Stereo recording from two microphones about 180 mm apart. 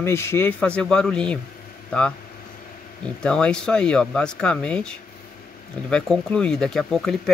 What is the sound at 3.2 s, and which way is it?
Speech, 5° left (ahead or behind).